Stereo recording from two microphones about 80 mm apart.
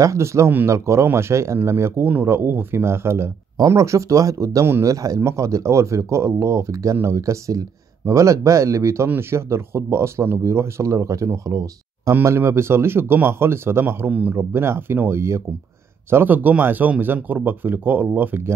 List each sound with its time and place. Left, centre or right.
0.0 s speech: right